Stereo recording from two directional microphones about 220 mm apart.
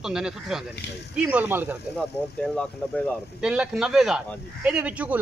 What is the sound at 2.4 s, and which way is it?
Speech, 5° left (ahead or behind).